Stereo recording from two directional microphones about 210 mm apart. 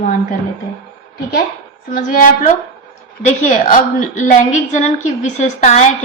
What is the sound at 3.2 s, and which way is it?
A woman's voice, 35° left (ahead or behind).